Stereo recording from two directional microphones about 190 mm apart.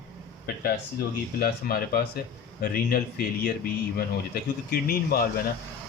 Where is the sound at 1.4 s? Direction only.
50° left (ahead or behind).